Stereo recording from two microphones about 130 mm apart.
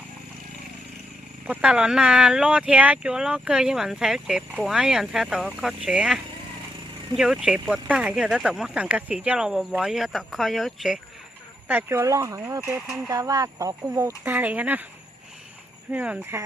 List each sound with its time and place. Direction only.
1.5 s speech: 5° right (ahead or behind)
11.7 s speech: 15° right (ahead or behind)
14.3 s speech: 15° right (ahead or behind)
15.9 s speech: 10° right (ahead or behind)